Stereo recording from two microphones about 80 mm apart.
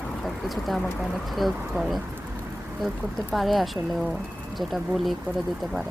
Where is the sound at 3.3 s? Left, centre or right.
Centre.